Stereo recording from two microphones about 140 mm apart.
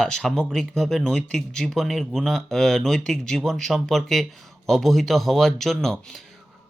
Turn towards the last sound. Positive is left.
turn(degrees=5)  # may be behind; listen again after turning